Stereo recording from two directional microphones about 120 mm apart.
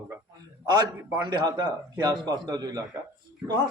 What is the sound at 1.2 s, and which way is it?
Speech, 35° right (ahead or behind).